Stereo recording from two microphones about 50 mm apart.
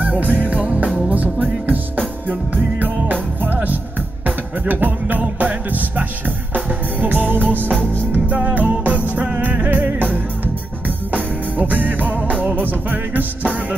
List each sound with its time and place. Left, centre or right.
0.0 s music: right
0.8 s music: centre
1.1 s music: right
11.5 s music: right